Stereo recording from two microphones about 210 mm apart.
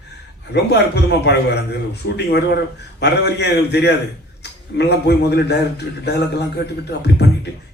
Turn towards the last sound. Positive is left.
turn(degrees=50)  # may be behind; listen again after turning